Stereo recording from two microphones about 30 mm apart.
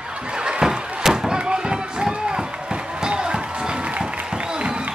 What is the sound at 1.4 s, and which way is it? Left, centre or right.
Run, right.